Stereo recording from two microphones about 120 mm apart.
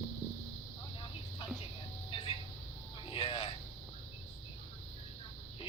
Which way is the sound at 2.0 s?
50° left (ahead or behind).